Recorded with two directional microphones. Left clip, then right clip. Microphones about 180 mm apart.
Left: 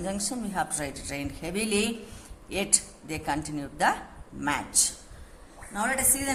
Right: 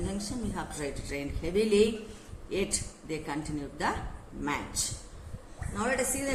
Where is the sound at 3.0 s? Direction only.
50° left (ahead or behind).